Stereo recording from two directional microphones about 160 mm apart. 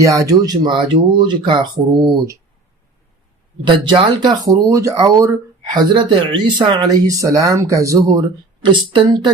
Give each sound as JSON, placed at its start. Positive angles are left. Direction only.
{"t": 0.0, "sound": "speech", "side_deg": -20}
{"t": 3.6, "sound": "speech", "side_deg": -30}